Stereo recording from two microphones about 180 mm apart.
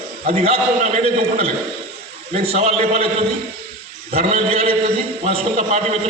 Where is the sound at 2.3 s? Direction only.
35° right (ahead or behind).